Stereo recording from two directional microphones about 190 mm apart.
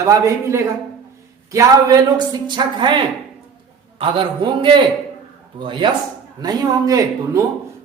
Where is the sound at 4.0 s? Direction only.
25° right (ahead or behind).